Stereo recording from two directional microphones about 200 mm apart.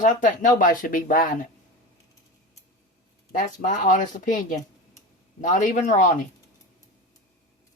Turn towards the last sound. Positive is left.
turn(degrees=40)  # may be behind; listen again after turning